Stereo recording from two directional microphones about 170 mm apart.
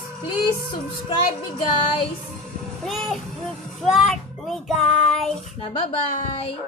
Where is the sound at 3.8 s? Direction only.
Centre (ahead or behind).